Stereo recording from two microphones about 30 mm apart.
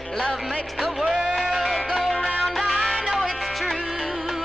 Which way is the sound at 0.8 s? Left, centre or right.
Centre.